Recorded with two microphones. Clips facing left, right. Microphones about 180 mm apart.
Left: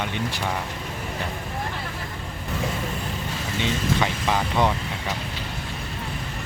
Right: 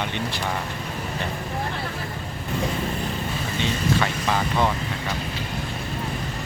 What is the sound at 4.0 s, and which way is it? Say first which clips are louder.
Speech: even; 15° left (ahead or behind).